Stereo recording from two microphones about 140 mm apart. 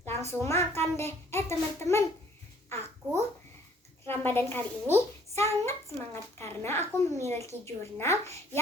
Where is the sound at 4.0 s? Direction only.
15° left (ahead or behind).